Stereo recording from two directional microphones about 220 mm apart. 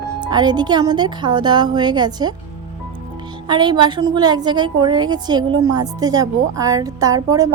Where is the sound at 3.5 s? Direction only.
20° right (ahead or behind).